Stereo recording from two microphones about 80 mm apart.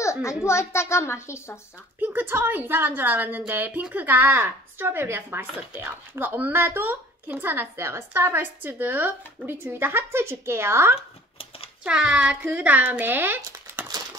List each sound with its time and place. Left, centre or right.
0.0 s a sound: left
0.5 s a child's voice: left
2.0 s a woman's voice: right
11.8 s a woman's voice: centre